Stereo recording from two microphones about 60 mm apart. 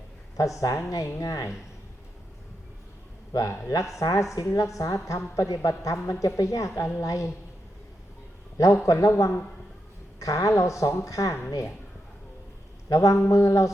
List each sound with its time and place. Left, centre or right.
0.3 s a woman's voice: left
3.9 s a woman's voice: left
8.6 s a woman's voice: left
12.9 s a woman's voice: left